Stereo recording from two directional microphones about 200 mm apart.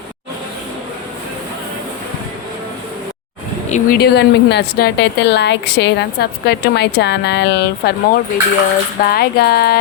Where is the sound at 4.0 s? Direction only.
55° left (ahead or behind).